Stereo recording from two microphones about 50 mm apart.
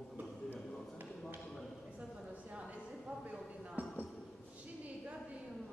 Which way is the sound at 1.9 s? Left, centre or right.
Centre.